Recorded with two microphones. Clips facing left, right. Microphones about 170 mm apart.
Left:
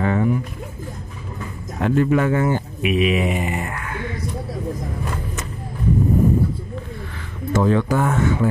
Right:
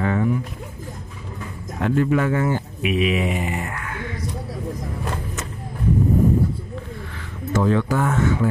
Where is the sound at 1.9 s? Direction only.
25° left (ahead or behind).